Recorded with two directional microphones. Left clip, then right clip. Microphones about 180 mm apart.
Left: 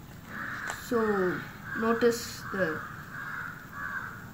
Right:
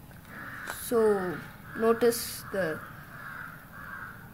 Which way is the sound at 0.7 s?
60° right (ahead or behind).